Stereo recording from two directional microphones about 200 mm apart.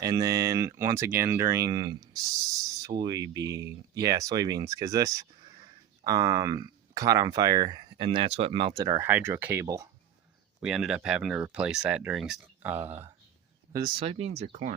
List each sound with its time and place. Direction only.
0.0 s speech: 15° right (ahead or behind)
10.6 s speech: 5° right (ahead or behind)
13.7 s speech: 25° right (ahead or behind)